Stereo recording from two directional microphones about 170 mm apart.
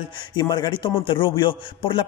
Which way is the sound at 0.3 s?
25° left (ahead or behind).